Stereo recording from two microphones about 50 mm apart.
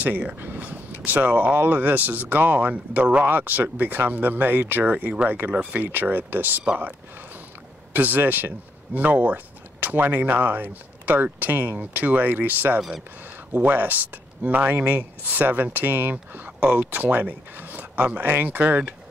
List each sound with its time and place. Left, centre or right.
0.0 s speech: right
0.4 s a sound: right
1.0 s speech: right
7.9 s speech: right